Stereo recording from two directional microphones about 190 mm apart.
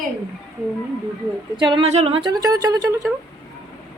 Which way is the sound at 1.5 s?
25° right (ahead or behind).